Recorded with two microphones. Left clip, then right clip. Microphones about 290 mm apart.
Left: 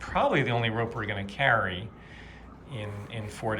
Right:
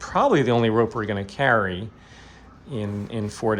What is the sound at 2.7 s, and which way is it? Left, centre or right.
Speech, right.